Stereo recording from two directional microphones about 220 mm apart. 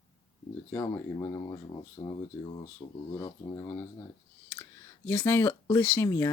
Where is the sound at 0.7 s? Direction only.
15° left (ahead or behind).